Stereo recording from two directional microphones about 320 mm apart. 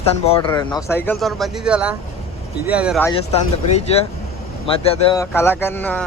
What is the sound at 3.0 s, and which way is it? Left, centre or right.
A man's voice, centre.